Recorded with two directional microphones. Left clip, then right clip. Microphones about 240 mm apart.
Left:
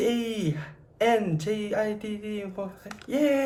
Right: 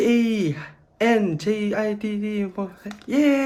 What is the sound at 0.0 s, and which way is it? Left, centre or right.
Speech, right.